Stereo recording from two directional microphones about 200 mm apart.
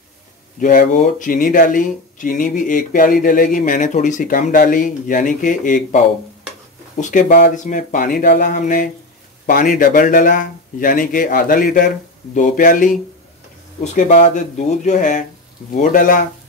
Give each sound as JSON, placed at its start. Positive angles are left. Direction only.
{"t": 0.6, "sound": "speech", "side_deg": 40}
{"t": 7.0, "sound": "speech", "side_deg": 40}